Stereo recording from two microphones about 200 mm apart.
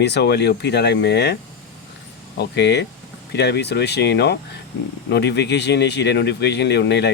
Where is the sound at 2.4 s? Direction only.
60° left (ahead or behind).